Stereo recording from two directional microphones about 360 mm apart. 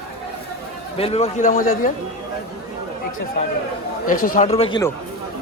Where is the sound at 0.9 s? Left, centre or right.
Centre.